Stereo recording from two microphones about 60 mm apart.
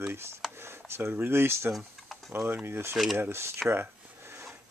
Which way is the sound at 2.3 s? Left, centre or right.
Right.